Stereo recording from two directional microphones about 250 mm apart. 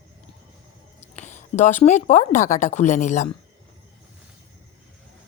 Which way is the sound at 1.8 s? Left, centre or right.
Left.